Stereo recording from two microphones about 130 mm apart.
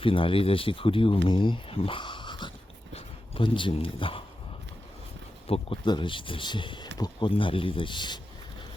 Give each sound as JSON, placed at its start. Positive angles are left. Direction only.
{"t": 0.0, "sound": "speech", "side_deg": 40}
{"t": 5.5, "sound": "speech", "side_deg": 40}